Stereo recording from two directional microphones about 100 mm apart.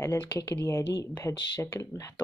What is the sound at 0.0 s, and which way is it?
A woman's voice, 35° left (ahead or behind).